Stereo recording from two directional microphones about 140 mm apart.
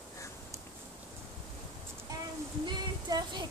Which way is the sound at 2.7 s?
30° right (ahead or behind).